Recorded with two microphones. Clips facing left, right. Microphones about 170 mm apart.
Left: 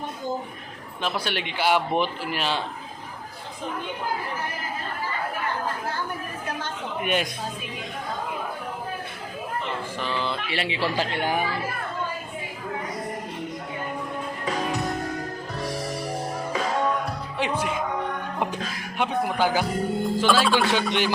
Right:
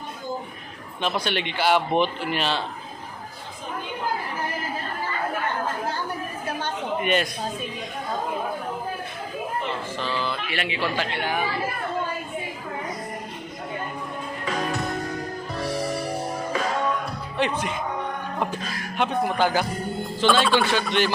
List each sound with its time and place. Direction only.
1.0 s a man's voice: 5° left (ahead or behind)
7.0 s speech: 10° left (ahead or behind)
10.0 s speech: 20° left (ahead or behind); by 11.3 s 40° left (ahead or behind)
17.3 s speech: 5° left (ahead or behind)
18.9 s a man's voice: 10° left (ahead or behind)
20.7 s speech: 15° left (ahead or behind)